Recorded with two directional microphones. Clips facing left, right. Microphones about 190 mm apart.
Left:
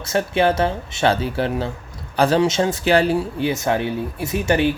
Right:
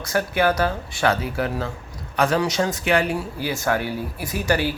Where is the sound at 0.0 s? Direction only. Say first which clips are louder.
Left 2 dB; 25° left (ahead or behind).